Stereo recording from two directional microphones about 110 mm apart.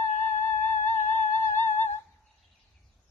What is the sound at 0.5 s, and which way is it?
Music, 90° left.